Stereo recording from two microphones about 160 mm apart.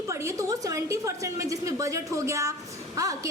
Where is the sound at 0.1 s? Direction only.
20° right (ahead or behind).